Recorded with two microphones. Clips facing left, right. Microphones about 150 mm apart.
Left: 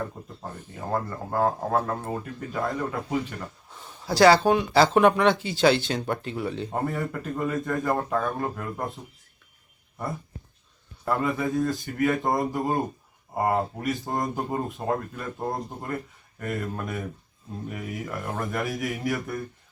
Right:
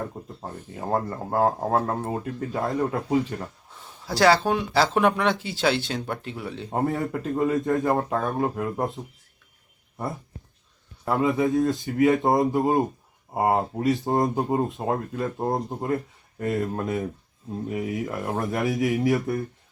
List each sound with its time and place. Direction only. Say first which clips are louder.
0.9 s speech: right 3 dB; 25° right (ahead or behind)
3.7 s a sound: left 1 dB; centre (ahead or behind)
4.0 s speech: left 2 dB; centre (ahead or behind)
6.7 s speech: right 3 dB; 20° right (ahead or behind)
11.1 s speech: right 4 dB; 20° right (ahead or behind)